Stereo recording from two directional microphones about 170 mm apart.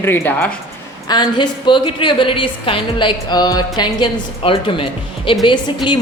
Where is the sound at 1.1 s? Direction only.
25° left (ahead or behind).